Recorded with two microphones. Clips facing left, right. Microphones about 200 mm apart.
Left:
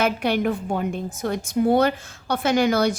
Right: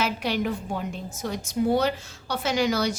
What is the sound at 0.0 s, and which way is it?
A woman's voice, 55° left (ahead or behind).